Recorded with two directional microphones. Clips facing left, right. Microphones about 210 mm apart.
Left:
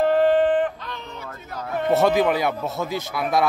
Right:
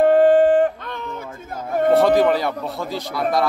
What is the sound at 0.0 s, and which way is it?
Music, 50° right (ahead or behind).